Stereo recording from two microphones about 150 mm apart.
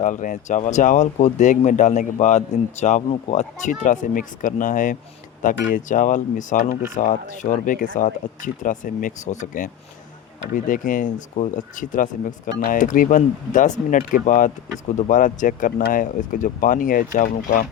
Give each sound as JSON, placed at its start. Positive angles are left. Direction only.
{"t": 0.0, "sound": "speech", "side_deg": 60}
{"t": 10.5, "sound": "speech", "side_deg": 65}